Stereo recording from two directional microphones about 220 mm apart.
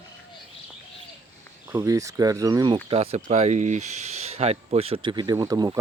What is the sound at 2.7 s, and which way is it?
Speech, 25° right (ahead or behind).